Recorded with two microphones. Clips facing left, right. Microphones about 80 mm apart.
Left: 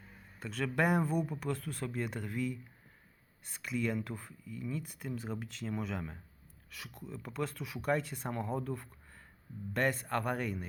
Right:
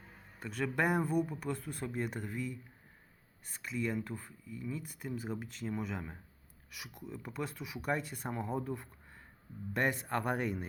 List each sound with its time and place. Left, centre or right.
0.3 s speech: centre